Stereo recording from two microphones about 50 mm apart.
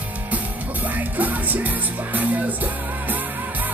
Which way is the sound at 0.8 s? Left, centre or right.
Right.